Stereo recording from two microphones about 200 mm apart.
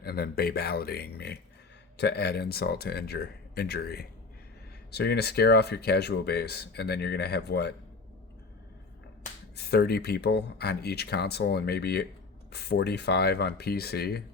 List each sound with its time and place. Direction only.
0.0 s speech: 50° left (ahead or behind)
9.6 s speech: 50° left (ahead or behind)